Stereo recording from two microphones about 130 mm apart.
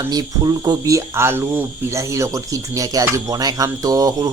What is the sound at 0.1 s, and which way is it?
Speech, 30° right (ahead or behind).